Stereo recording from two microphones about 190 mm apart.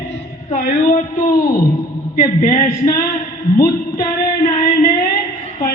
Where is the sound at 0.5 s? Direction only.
45° left (ahead or behind).